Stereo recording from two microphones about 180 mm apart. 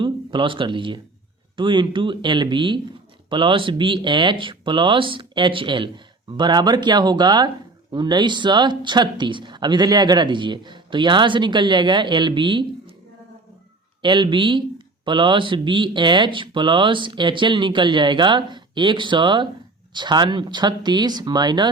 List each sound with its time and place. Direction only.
0.0 s speech: 25° right (ahead or behind)
14.0 s speech: 25° right (ahead or behind)